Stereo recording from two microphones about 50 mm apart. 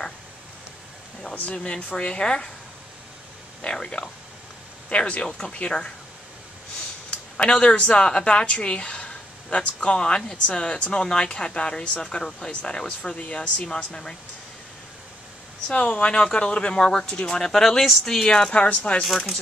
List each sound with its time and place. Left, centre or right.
1.3 s speech: left
3.6 s speech: centre
7.1 s speech: left
15.7 s speech: left